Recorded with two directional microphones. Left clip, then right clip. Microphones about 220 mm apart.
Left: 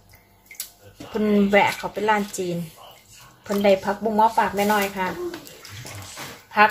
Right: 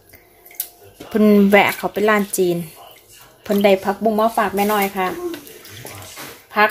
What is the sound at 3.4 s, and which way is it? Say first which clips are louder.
Speech: right 4 dB; 40° right (ahead or behind).